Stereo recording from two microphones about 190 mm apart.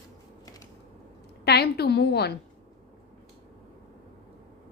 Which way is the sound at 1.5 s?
60° left (ahead or behind).